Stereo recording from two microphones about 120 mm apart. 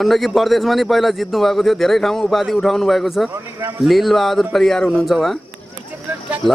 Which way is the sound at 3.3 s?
25° right (ahead or behind).